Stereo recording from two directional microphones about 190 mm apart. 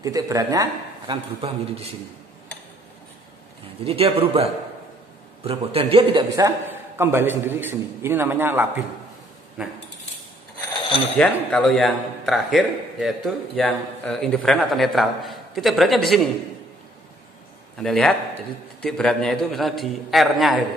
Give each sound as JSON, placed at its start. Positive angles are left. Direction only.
{"t": 0.0, "sound": "a man's voice", "side_deg": -15}
{"t": 3.8, "sound": "a man's voice", "side_deg": -30}
{"t": 11.1, "sound": "a man's voice", "side_deg": 5}
{"t": 17.7, "sound": "a man's voice", "side_deg": 5}